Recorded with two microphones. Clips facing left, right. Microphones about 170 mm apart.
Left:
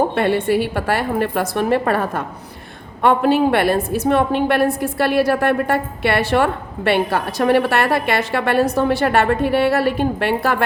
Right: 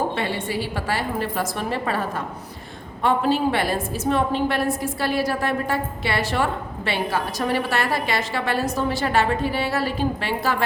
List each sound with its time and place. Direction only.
0.2 s a woman's voice: 60° left (ahead or behind)